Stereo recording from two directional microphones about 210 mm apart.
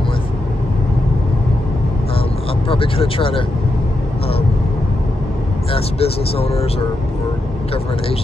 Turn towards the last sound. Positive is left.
turn(degrees=30)  # may be behind; listen again after turning